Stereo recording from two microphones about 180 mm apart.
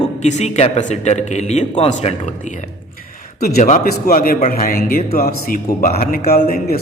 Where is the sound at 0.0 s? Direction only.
40° left (ahead or behind).